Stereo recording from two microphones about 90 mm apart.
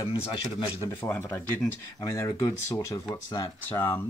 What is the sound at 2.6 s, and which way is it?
Speech, 30° left (ahead or behind).